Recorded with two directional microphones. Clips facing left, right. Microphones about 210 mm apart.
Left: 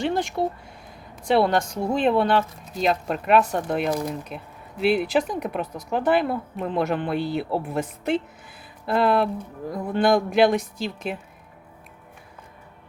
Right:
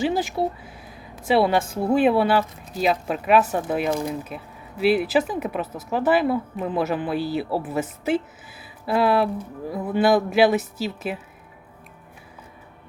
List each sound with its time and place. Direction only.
0.0 s speech: 5° right (ahead or behind)